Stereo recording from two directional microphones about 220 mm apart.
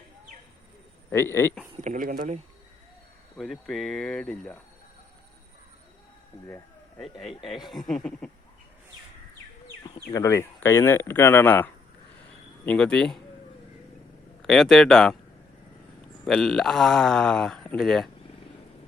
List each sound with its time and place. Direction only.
1.1 s speech: 10° left (ahead or behind)
1.8 s speech: 35° right (ahead or behind)
3.3 s speech: centre (ahead or behind)
7.0 s speech: centre (ahead or behind)
9.8 s speech: 20° left (ahead or behind)
14.4 s speech: centre (ahead or behind)
16.2 s speech: centre (ahead or behind)